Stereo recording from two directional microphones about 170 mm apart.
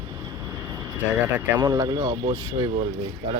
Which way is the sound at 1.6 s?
20° right (ahead or behind).